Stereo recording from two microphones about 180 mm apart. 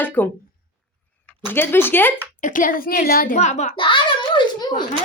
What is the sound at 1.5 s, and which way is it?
Speech, 10° left (ahead or behind).